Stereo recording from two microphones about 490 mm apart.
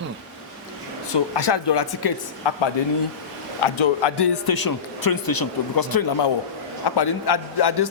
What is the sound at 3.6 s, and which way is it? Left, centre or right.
A man's voice, left.